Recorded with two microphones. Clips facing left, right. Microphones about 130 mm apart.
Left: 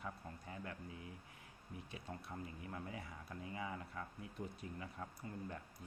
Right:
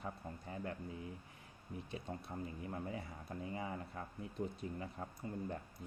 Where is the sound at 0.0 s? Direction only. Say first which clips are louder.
Right 3 dB; 30° right (ahead or behind).